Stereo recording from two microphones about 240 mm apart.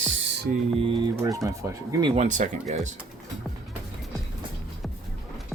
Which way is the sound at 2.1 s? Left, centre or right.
Right.